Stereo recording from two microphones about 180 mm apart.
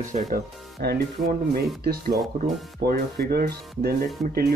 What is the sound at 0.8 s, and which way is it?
Speech, 60° right (ahead or behind).